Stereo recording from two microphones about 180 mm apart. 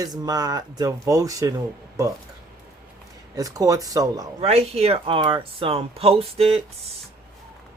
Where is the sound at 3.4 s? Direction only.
20° right (ahead or behind).